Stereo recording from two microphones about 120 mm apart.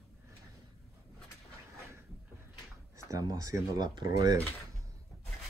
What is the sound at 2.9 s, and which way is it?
Speech, 30° right (ahead or behind).